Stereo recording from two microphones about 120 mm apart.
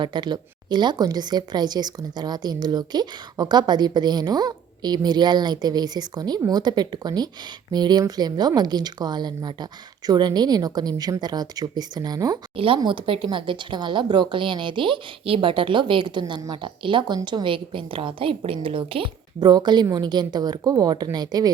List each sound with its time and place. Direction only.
0.0 s a woman's voice: 40° right (ahead or behind)
12.5 s a woman's voice: 45° right (ahead or behind)